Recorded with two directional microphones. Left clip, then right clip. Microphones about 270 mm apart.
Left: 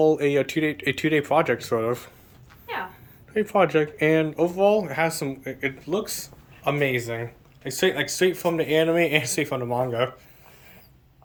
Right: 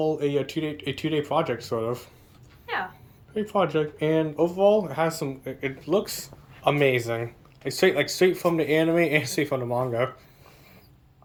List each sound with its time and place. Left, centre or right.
0.0 s speech: centre
3.3 s speech: centre
4.7 s speech: right
5.2 s speech: centre